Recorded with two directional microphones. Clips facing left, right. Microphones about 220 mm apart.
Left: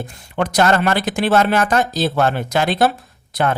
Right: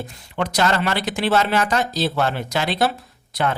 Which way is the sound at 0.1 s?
50° left (ahead or behind).